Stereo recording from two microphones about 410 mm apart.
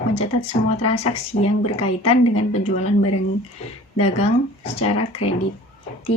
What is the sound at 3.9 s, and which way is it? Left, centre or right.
Speech, centre.